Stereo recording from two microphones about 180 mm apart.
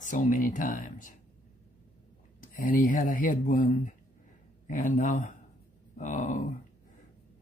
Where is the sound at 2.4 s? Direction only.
50° left (ahead or behind).